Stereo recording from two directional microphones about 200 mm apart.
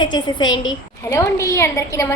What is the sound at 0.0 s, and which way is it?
A woman's voice, 20° left (ahead or behind).